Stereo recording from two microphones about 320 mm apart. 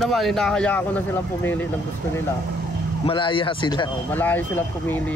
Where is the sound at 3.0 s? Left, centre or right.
Centre.